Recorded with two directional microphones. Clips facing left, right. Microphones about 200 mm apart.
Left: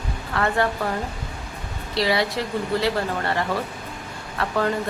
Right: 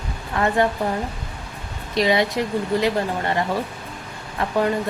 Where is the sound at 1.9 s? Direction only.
20° right (ahead or behind).